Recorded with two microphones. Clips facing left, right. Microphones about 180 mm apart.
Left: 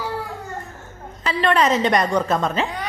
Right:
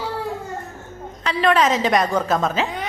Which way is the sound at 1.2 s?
Centre (ahead or behind).